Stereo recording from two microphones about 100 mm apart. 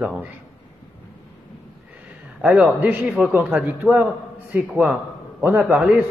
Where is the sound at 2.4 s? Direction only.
10° right (ahead or behind).